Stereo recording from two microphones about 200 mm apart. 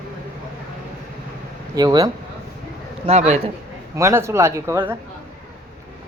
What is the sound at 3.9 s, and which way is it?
Speech, 15° right (ahead or behind).